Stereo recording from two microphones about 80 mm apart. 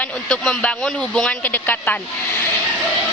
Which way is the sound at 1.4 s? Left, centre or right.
Left.